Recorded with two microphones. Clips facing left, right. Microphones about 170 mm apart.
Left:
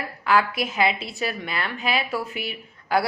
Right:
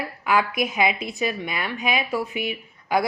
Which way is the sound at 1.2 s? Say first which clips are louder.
Right 1 dB; 15° right (ahead or behind).